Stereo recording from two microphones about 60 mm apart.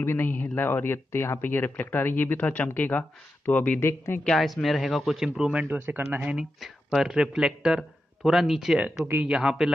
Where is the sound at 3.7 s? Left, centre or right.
Left.